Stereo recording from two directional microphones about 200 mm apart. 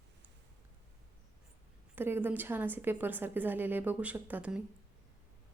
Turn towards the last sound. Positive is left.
turn(degrees=-5)  # may be behind; listen again after turning